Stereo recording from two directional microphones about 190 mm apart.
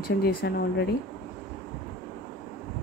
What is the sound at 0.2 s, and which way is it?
Speech, 55° left (ahead or behind).